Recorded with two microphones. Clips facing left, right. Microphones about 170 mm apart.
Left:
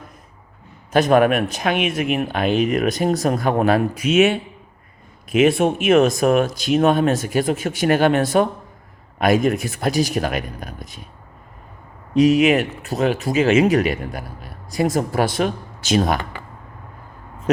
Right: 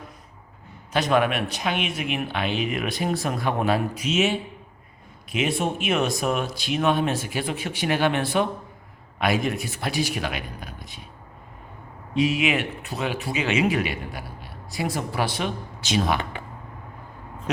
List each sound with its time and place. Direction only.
0.9 s speech: 50° left (ahead or behind)
4.0 s speech: 60° left (ahead or behind)
12.1 s speech: 45° left (ahead or behind)